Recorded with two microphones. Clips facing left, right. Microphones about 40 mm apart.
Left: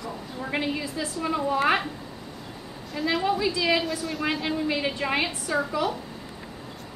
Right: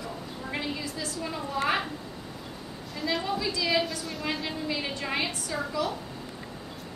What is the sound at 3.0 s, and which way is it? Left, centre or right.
Speech, centre.